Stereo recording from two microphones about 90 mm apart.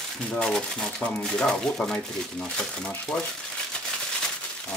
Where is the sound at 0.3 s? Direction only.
10° left (ahead or behind).